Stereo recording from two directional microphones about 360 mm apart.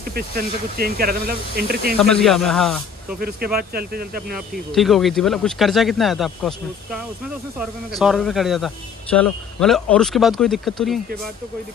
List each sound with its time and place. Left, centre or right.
0.1 s speech: right
2.0 s a man's voice: centre
3.2 s speech: right
4.7 s a man's voice: centre